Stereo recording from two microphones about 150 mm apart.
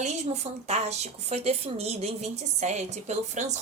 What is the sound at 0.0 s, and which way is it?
A woman's voice, 45° right (ahead or behind).